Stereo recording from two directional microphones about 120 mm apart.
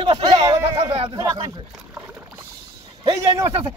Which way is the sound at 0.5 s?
35° right (ahead or behind).